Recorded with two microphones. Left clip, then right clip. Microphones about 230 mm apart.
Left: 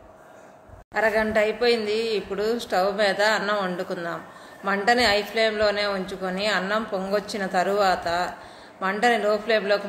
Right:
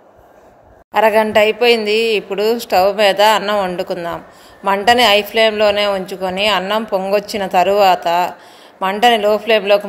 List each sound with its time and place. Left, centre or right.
0.9 s a woman's voice: right